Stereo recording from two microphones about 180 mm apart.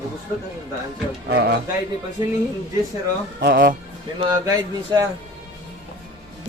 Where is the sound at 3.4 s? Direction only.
55° right (ahead or behind).